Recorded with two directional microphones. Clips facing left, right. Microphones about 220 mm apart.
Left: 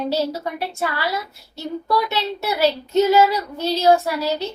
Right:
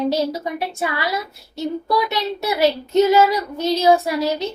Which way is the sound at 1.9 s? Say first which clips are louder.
Left 1 dB; 15° right (ahead or behind).